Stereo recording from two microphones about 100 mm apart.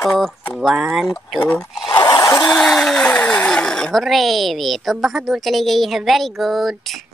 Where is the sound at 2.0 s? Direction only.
45° left (ahead or behind).